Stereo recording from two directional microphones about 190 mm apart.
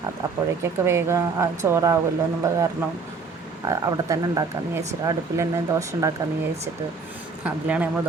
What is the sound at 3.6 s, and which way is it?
Speech, 20° right (ahead or behind).